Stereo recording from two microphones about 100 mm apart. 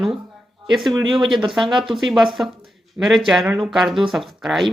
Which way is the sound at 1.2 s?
55° right (ahead or behind).